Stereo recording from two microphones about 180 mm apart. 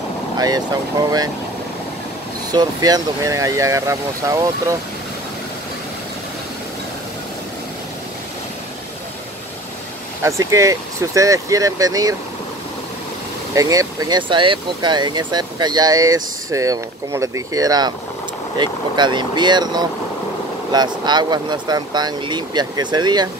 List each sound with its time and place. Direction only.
0.4 s speech: 20° right (ahead or behind)
2.5 s speech: 20° right (ahead or behind)
10.2 s speech: 15° right (ahead or behind)
13.6 s speech: 20° right (ahead or behind)